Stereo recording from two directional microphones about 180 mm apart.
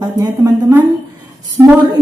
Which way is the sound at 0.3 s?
15° right (ahead or behind).